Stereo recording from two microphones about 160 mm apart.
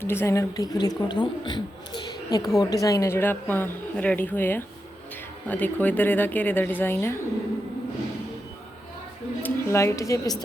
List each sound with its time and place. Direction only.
0.0 s a woman's voice: 15° left (ahead or behind)
9.4 s a woman's voice: 15° left (ahead or behind)